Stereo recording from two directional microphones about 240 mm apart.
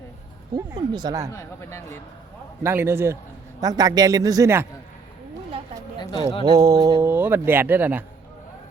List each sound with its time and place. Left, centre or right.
0.5 s speech: centre
1.3 s speech: centre
2.6 s speech: centre
6.0 s speech: centre
6.4 s speech: centre